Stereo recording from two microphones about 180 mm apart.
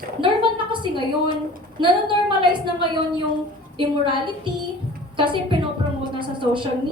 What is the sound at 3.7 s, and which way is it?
A woman's voice, 25° right (ahead or behind).